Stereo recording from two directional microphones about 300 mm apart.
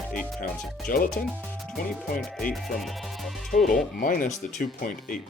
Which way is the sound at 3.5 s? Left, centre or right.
Left.